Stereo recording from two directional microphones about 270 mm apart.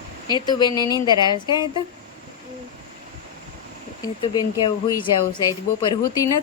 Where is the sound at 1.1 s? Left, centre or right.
Centre.